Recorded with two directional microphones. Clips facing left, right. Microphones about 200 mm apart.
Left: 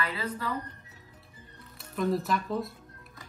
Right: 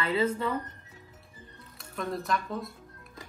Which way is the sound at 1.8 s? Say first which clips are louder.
Left 5 dB; centre (ahead or behind).